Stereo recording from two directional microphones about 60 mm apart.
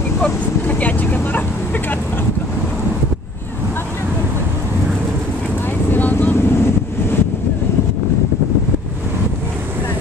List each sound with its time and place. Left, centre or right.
0.2 s vehicle: left
5.9 s vehicle: left
6.3 s vehicle: left